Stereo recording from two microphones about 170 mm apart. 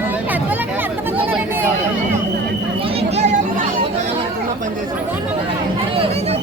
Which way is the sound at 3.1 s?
40° right (ahead or behind).